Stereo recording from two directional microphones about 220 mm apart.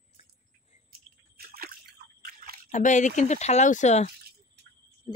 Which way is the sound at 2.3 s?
40° right (ahead or behind).